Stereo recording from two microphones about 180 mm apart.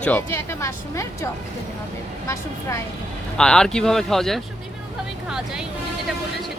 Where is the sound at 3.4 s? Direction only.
5° left (ahead or behind).